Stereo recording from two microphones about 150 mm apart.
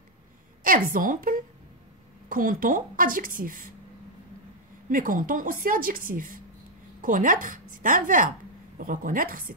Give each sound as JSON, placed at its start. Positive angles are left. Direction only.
{"t": 0.7, "sound": "a woman's voice", "side_deg": -70}
{"t": 4.8, "sound": "a woman's voice", "side_deg": -65}